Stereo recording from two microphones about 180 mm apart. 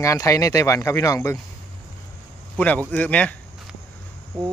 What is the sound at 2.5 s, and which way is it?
Speech, 10° left (ahead or behind).